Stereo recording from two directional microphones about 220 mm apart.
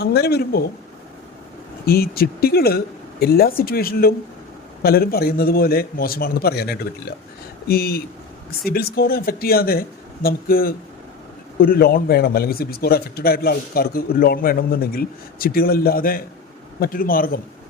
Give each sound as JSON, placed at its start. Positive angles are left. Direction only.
{"t": 0.0, "sound": "a man's voice", "side_deg": 45}
{"t": 1.9, "sound": "a man's voice", "side_deg": 45}